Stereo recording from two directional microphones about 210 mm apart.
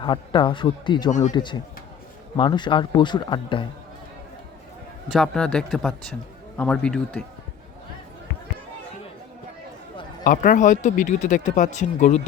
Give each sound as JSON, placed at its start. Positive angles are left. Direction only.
{"t": 0.0, "sound": "speech", "side_deg": 25}
{"t": 5.1, "sound": "speech", "side_deg": 5}
{"t": 10.2, "sound": "speech", "side_deg": 40}